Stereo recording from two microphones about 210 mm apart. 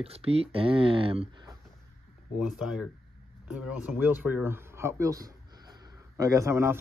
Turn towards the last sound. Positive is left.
turn(degrees=-10)  # may be behind; listen again after turning